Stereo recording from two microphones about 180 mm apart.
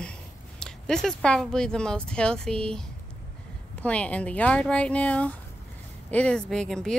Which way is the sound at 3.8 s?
5° left (ahead or behind).